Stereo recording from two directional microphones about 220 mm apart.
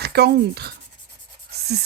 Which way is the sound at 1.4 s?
45° right (ahead or behind).